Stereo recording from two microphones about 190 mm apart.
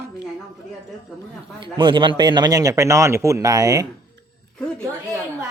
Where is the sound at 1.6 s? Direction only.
25° right (ahead or behind).